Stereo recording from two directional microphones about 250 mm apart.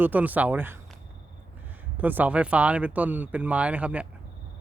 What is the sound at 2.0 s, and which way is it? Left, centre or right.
Speech, centre.